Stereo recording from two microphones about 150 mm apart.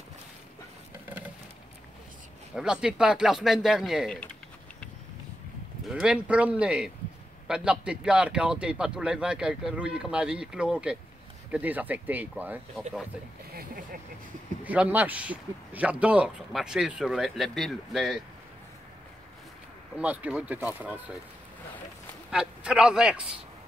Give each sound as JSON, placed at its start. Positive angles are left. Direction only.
{"t": 2.5, "sound": "a man's voice", "side_deg": -5}
{"t": 5.9, "sound": "a man's voice", "side_deg": -5}
{"t": 13.5, "sound": "vehicle", "side_deg": -80}
{"t": 14.6, "sound": "speech", "side_deg": -10}
{"t": 20.0, "sound": "speech", "side_deg": -10}
{"t": 22.3, "sound": "a man's voice", "side_deg": -5}